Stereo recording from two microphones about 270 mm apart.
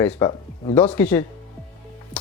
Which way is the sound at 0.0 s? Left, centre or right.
Centre.